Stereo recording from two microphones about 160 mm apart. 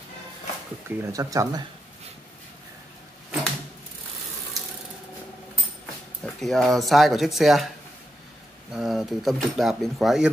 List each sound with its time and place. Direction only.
0.8 s speech: 20° right (ahead or behind)
6.2 s speech: centre (ahead or behind)
8.7 s speech: centre (ahead or behind)